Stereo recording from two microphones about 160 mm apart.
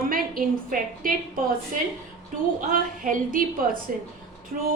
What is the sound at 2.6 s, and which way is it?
Speech, 60° right (ahead or behind).